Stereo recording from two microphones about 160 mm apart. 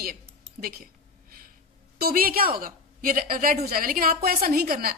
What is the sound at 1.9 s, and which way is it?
A woman's voice, 70° right (ahead or behind).